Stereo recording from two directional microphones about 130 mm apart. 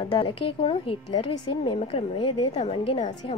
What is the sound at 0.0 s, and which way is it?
A woman's voice, 45° left (ahead or behind).